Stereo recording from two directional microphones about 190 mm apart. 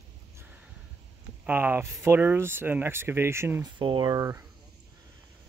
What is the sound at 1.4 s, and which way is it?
Speech, 10° right (ahead or behind).